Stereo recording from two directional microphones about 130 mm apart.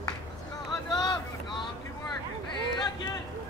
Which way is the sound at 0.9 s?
30° left (ahead or behind).